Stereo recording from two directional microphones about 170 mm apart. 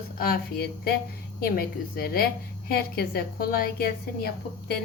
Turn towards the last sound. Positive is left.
turn(degrees=65)  # may be behind; listen again after turning